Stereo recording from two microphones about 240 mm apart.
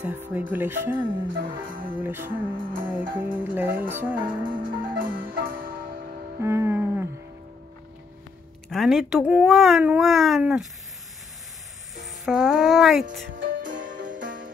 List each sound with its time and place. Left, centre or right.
0.0 s speech: centre
1.2 s music: right
2.0 s speech: centre
2.4 s music: right
3.3 s speech: centre
4.2 s music: right
6.4 s music: centre
8.6 s speech: centre
12.3 s speech: centre
13.6 s music: right